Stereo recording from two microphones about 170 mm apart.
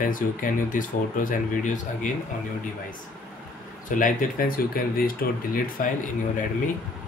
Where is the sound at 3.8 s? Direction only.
50° left (ahead or behind).